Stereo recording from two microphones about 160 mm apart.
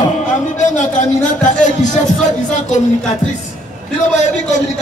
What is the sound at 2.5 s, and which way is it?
Speech, 50° left (ahead or behind).